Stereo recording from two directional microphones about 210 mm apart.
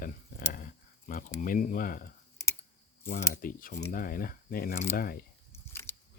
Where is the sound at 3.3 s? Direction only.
40° left (ahead or behind).